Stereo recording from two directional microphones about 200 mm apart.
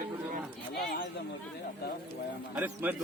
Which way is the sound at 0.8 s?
50° left (ahead or behind).